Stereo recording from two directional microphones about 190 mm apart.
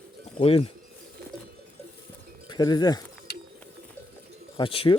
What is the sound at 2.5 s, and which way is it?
Speech, 20° left (ahead or behind).